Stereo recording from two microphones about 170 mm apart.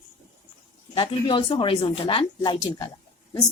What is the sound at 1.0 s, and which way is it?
A woman's voice, 30° left (ahead or behind).